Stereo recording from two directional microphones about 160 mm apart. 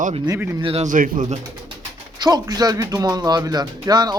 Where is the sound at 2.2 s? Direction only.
25° right (ahead or behind).